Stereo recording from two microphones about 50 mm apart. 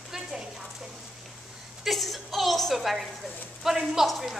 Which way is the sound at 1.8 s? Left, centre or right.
Centre.